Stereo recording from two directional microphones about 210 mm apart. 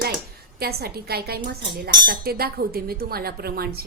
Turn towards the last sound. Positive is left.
turn(degrees=-45)  # may be behind; listen again after turning